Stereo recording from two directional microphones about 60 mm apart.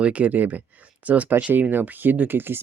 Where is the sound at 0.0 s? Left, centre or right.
Right.